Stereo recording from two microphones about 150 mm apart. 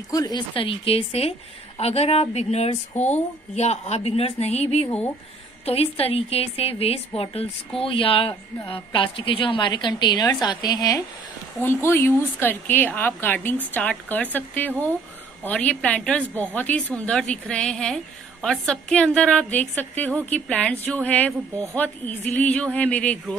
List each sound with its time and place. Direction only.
0.1 s a woman's voice: 25° left (ahead or behind)
11.6 s a woman's voice: 15° left (ahead or behind)